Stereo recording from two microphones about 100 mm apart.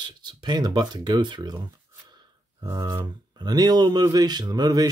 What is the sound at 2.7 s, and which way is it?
Speech, 45° right (ahead or behind).